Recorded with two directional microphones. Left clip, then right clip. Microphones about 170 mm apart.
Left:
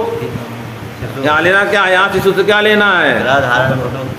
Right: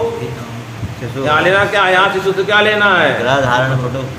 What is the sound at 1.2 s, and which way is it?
A man's voice, 50° left (ahead or behind).